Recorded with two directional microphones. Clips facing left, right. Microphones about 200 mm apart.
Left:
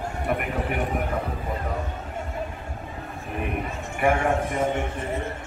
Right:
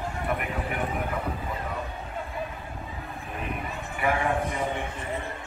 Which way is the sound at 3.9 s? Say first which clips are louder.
Left 4 dB; 45° left (ahead or behind).